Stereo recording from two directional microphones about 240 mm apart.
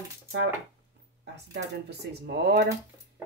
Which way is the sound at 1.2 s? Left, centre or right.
Right.